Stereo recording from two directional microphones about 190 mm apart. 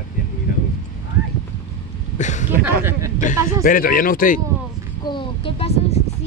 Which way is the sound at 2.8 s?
10° right (ahead or behind).